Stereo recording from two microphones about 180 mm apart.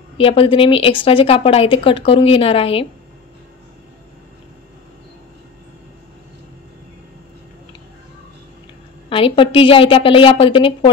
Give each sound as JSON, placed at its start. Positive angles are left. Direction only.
{"t": 0.2, "sound": "speech", "side_deg": 30}
{"t": 9.1, "sound": "a woman's voice", "side_deg": 30}